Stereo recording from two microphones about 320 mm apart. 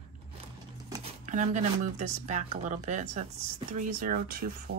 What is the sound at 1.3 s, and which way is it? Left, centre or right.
Speech, right.